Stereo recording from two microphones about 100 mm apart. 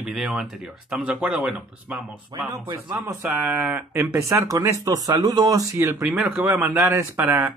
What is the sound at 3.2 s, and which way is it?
Speech, 15° right (ahead or behind).